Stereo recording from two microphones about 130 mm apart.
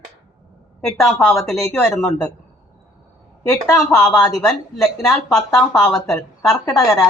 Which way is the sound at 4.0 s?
5° left (ahead or behind).